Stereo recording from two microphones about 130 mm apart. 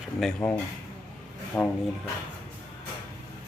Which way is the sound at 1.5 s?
10° left (ahead or behind).